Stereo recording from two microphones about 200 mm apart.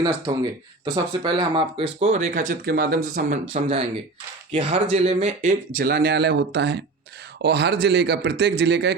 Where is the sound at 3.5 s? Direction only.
30° right (ahead or behind).